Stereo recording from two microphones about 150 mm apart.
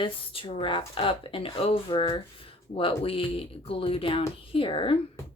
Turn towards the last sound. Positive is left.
turn(degrees=35)  # may be behind; listen again after turning